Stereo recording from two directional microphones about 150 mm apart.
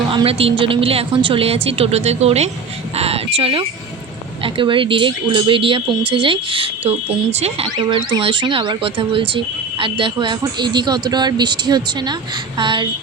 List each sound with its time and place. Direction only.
0.1 s speech: 35° right (ahead or behind)
2.9 s a sound: 40° right (ahead or behind)
4.4 s speech: 35° right (ahead or behind)